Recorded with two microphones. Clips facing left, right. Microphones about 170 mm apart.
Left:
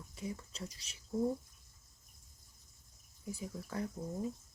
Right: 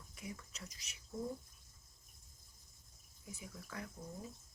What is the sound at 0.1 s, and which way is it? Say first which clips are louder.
Speech: left 6 dB; 30° left (ahead or behind).